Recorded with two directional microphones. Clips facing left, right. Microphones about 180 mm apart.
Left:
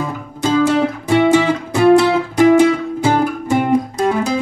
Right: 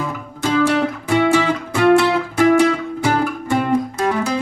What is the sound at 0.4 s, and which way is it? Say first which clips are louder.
Music: left 3 dB; 20° left (ahead or behind).